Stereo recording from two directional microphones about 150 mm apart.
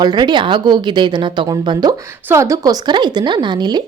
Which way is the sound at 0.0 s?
30° right (ahead or behind).